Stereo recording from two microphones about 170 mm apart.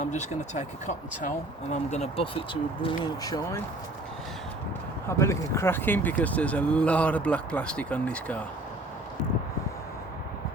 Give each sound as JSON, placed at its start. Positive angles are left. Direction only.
{"t": 0.0, "sound": "speech", "side_deg": 45}
{"t": 5.0, "sound": "speech", "side_deg": 15}